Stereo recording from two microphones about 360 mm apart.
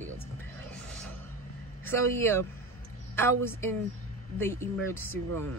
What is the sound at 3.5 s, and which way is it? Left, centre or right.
Speech, centre.